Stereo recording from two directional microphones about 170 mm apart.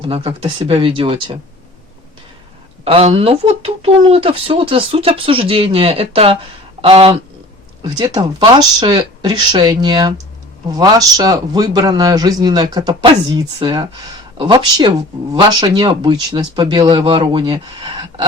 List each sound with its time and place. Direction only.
0.0 s speech: 35° right (ahead or behind)
2.8 s speech: 35° right (ahead or behind)